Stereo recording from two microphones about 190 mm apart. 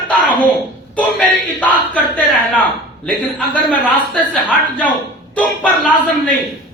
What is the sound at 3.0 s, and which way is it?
A man's voice, 5° left (ahead or behind).